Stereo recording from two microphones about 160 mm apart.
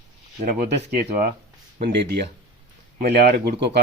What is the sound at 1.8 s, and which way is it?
Speech, 90° right.